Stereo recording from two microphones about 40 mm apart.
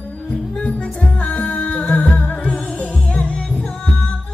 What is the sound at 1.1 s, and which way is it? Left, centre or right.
Music, left.